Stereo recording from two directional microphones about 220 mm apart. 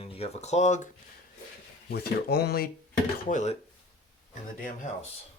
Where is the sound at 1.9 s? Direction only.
45° left (ahead or behind).